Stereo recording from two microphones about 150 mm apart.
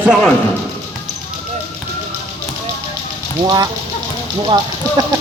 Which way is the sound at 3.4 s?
25° right (ahead or behind).